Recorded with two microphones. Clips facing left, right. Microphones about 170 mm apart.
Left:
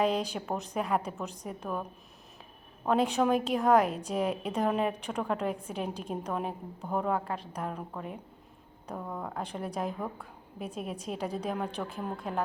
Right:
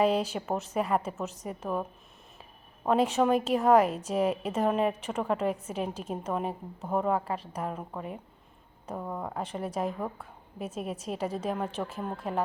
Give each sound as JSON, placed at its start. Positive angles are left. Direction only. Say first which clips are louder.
{"t": 0.0, "sound": "a woman's voice", "louder": "right 3 dB", "side_deg": -5}